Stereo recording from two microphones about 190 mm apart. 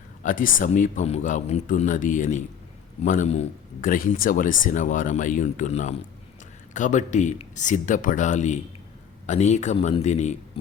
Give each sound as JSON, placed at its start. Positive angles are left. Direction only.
{"t": 0.2, "sound": "speech", "side_deg": 45}